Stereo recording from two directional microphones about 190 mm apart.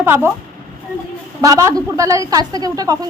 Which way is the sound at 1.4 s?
15° right (ahead or behind).